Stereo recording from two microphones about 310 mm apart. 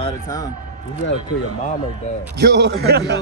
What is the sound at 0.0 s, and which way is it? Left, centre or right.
Speech, centre.